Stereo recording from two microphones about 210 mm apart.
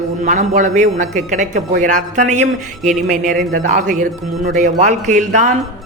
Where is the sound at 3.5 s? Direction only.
40° right (ahead or behind).